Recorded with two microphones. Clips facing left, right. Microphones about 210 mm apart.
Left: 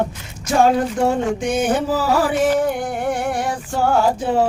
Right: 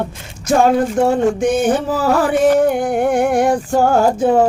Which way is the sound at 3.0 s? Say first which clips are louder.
Right 7 dB; 50° right (ahead or behind).